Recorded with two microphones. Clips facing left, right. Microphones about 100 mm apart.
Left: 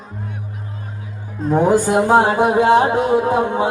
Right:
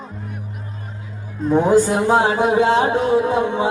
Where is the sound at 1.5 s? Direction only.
45° left (ahead or behind).